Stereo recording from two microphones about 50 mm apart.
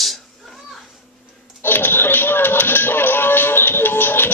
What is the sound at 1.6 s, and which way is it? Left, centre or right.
Music, left.